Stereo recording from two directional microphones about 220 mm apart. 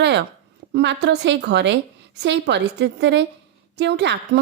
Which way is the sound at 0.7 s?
50° right (ahead or behind).